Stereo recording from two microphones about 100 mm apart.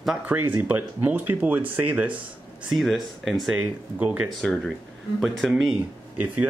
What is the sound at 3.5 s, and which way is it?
Speech, 15° right (ahead or behind).